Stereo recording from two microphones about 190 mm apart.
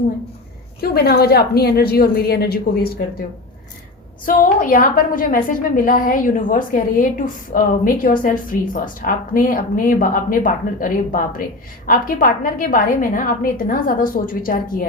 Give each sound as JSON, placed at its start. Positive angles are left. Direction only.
{"t": 0.8, "sound": "a woman's voice", "side_deg": 55}
{"t": 4.3, "sound": "a woman's voice", "side_deg": 45}